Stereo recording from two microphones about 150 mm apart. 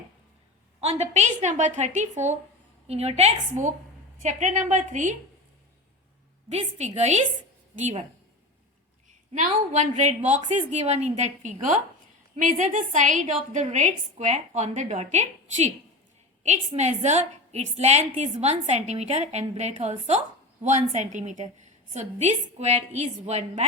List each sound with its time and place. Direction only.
0.8 s a woman's voice: 45° right (ahead or behind)
6.5 s a woman's voice: 45° right (ahead or behind)
9.3 s a woman's voice: 55° right (ahead or behind)
12.4 s a woman's voice: 55° right (ahead or behind)